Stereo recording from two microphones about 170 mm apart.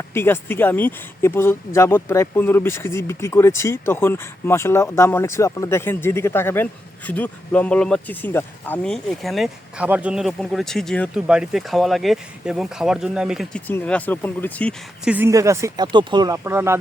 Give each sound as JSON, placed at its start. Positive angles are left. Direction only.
{"t": 0.1, "sound": "speech", "side_deg": 15}
{"t": 15.0, "sound": "speech", "side_deg": -10}
{"t": 16.4, "sound": "speech", "side_deg": -15}